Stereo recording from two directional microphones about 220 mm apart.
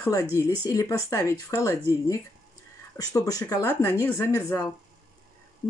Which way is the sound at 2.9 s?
15° left (ahead or behind).